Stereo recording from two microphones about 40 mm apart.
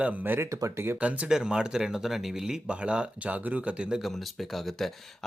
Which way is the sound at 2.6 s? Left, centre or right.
Right.